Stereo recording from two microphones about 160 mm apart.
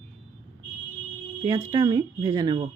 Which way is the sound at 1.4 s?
25° right (ahead or behind).